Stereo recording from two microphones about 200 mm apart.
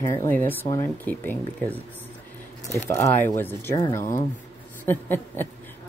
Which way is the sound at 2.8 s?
10° left (ahead or behind).